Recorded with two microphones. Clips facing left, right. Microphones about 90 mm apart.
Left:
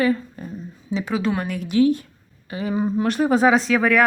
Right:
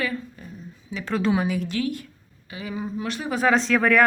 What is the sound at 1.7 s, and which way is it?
Speech, 25° left (ahead or behind).